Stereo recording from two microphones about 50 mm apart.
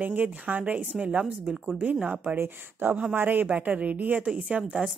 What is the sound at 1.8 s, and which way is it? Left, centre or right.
Speech, right.